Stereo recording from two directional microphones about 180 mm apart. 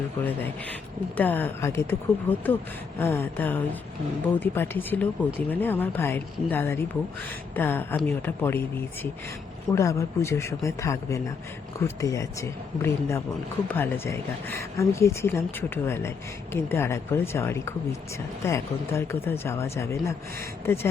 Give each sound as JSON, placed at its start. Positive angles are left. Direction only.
{"t": 0.2, "sound": "a woman's voice", "side_deg": 10}